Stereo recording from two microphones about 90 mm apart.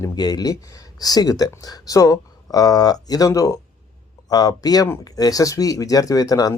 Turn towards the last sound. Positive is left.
turn(degrees=45)  # may be behind; listen again after turning